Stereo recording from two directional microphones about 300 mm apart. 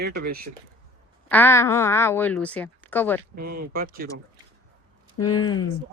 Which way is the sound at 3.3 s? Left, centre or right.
Right.